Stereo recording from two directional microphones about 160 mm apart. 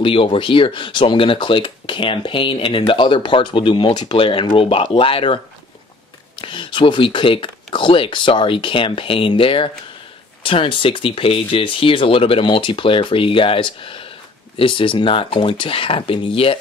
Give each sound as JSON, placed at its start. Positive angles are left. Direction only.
{"t": 0.0, "sound": "speech", "side_deg": 35}
{"t": 6.4, "sound": "speech", "side_deg": 30}